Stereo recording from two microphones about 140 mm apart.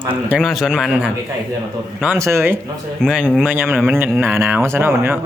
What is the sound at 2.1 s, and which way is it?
Speech, 20° right (ahead or behind).